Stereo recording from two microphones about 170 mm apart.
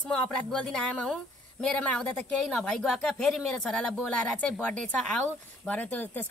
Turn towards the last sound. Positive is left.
turn(degrees=10)  # may be behind; listen again after turning